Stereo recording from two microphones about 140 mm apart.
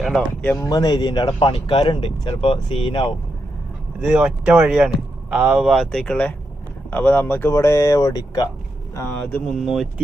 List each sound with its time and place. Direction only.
0.6 s speech: 25° left (ahead or behind)
4.0 s speech: 5° right (ahead or behind); by 8.4 s 25° left (ahead or behind)
9.0 s speech: 15° left (ahead or behind)